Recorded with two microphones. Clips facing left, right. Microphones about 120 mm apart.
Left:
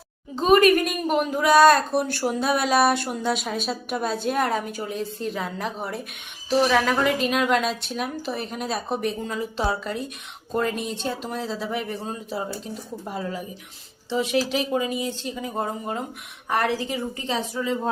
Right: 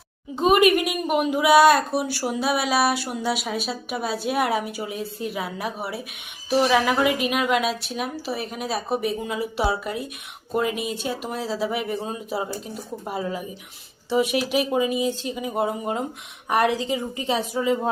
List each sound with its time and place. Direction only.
0.3 s a woman's voice: 15° right (ahead or behind)